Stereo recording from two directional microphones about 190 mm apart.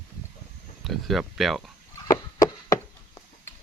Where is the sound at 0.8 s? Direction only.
Centre (ahead or behind).